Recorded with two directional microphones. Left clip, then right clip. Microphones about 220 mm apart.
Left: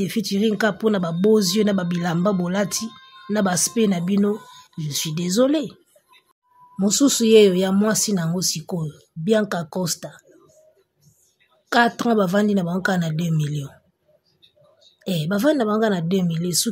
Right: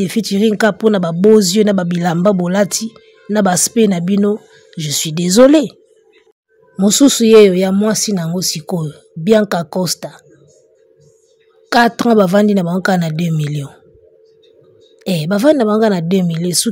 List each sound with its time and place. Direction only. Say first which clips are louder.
0.0 s speech: right 7 dB; 35° right (ahead or behind)
6.8 s speech: right 8 dB; 35° right (ahead or behind)
11.7 s speech: right 7 dB; 40° right (ahead or behind)
15.0 s speech: right 8 dB; 35° right (ahead or behind)